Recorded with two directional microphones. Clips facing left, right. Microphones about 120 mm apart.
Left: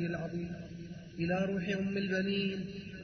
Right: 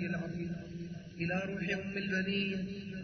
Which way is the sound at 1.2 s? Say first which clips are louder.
Left 4 dB; 15° left (ahead or behind).